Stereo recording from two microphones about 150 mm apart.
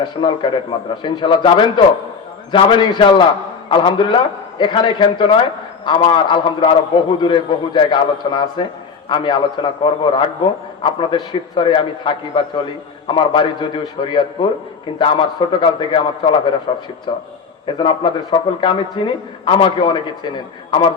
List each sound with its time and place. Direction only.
0.0 s a man's voice: 30° left (ahead or behind)